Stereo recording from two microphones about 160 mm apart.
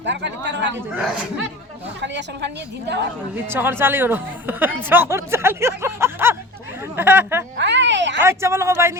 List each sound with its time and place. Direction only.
0.0 s a woman's voice: 90° right
2.0 s a woman's voice: 90° right
3.5 s speech: 15° right (ahead or behind)
7.6 s a sound: 90° right
8.2 s speech: 15° right (ahead or behind)